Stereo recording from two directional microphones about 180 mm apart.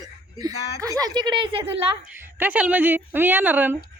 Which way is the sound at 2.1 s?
10° right (ahead or behind).